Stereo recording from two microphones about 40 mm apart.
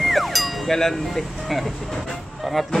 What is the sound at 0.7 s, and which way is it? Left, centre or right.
Speech, centre.